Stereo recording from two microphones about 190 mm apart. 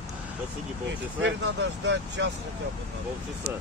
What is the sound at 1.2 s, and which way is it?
Speech, 70° right (ahead or behind).